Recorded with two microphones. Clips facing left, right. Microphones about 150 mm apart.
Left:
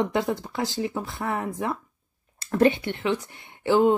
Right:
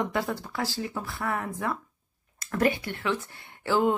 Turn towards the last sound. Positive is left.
turn(degrees=20)  # may be behind; listen again after turning